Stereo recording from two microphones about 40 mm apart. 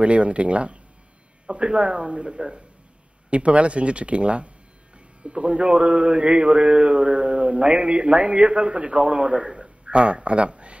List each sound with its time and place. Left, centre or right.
0.0 s a man's voice: right
3.3 s a man's voice: right